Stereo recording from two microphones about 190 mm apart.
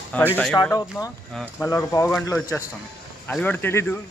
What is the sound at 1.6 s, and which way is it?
Speech, 15° left (ahead or behind).